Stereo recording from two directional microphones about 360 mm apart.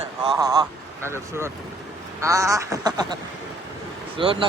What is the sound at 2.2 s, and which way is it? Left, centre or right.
Speech, centre.